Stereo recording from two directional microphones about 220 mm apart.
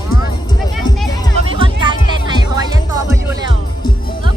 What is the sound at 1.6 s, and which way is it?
Music, 20° right (ahead or behind).